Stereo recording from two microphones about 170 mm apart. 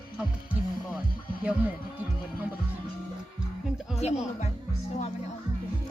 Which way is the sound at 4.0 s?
40° left (ahead or behind).